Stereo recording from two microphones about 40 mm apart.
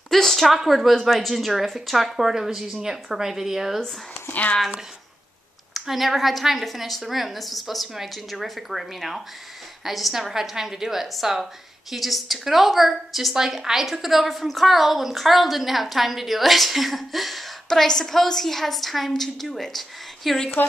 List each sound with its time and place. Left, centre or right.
0.1 s a woman's voice: centre
4.3 s speech: left
5.7 s a woman's voice: centre
17.6 s a woman's voice: centre
20.6 s speech: left